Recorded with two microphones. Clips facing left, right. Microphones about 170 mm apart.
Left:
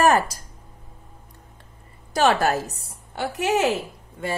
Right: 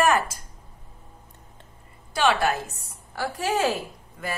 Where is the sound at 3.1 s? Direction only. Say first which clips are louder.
Left 3 dB; 20° left (ahead or behind).